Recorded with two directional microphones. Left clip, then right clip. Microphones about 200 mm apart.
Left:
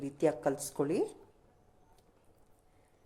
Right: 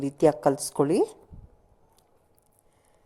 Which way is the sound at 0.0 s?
30° right (ahead or behind).